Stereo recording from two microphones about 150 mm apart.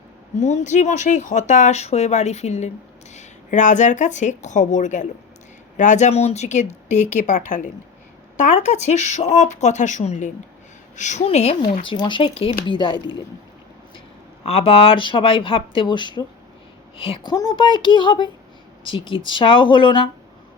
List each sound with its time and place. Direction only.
0.3 s a woman's voice: 50° left (ahead or behind); by 13.2 s 30° left (ahead or behind)
14.4 s speech: 40° left (ahead or behind)
17.3 s speech: 25° left (ahead or behind)